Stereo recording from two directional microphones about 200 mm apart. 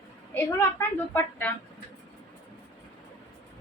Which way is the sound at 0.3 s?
10° left (ahead or behind).